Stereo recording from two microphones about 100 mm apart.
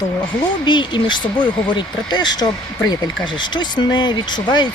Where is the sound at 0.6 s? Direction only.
50° left (ahead or behind).